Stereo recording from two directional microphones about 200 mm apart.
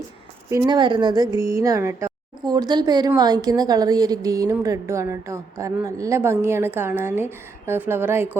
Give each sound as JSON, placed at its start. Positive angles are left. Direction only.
{"t": 0.5, "sound": "speech", "side_deg": -20}